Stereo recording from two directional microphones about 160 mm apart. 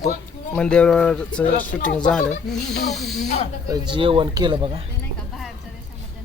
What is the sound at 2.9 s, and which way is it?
Speech, centre (ahead or behind).